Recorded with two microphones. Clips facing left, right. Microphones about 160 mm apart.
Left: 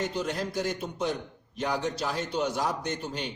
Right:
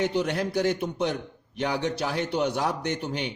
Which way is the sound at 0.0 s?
65° right (ahead or behind).